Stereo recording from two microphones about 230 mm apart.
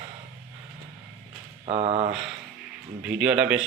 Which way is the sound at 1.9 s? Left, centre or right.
Centre.